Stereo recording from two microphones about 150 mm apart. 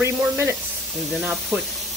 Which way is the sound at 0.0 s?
15° right (ahead or behind).